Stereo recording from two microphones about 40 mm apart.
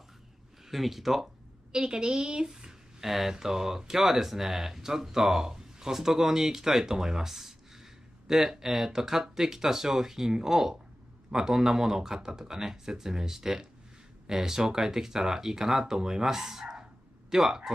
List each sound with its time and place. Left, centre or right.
0.7 s speech: centre
1.7 s a woman's voice: right
2.5 s speech: centre